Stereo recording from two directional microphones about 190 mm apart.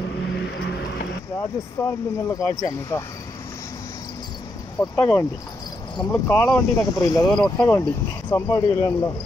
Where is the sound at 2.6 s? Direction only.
15° left (ahead or behind).